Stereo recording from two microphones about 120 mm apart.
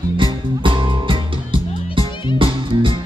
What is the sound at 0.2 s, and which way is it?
Music, 45° right (ahead or behind).